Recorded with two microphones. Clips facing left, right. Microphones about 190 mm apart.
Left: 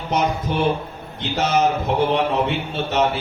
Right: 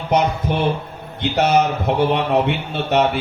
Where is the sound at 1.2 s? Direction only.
60° right (ahead or behind).